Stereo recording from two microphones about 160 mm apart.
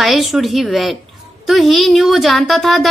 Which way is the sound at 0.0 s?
Centre (ahead or behind).